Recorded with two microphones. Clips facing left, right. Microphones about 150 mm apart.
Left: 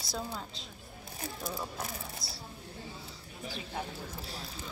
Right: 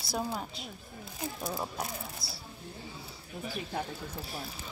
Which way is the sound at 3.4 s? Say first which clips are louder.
Right 4 dB; 50° right (ahead or behind).